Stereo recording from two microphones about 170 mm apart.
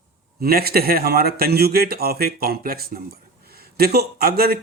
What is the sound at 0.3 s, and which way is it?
A man's voice, 65° right (ahead or behind).